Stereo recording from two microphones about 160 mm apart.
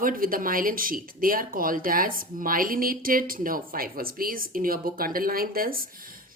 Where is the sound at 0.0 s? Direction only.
60° right (ahead or behind).